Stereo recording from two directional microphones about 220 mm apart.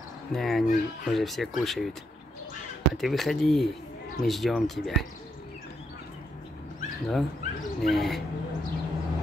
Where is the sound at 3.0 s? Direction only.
Centre (ahead or behind).